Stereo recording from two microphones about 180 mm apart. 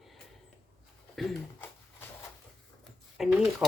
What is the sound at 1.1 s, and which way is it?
Speech, centre (ahead or behind).